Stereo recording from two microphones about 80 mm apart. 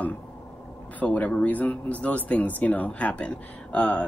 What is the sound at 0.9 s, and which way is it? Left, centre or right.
Speech, centre.